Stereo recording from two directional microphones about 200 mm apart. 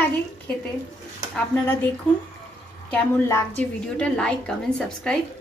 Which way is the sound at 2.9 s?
10° left (ahead or behind).